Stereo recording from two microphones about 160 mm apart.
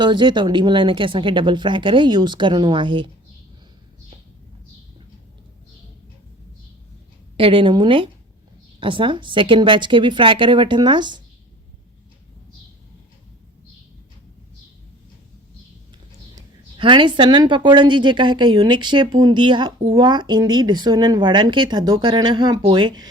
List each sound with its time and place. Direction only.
0.0 s a woman's voice: 30° right (ahead or behind)
7.3 s a woman's voice: 35° right (ahead or behind)
16.3 s a woman's voice: 30° right (ahead or behind)